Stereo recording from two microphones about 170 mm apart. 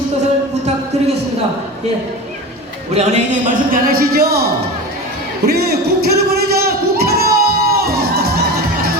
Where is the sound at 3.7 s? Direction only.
60° right (ahead or behind).